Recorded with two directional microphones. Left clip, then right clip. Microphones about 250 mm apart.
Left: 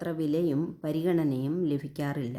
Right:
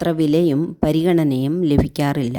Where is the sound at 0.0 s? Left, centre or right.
Right.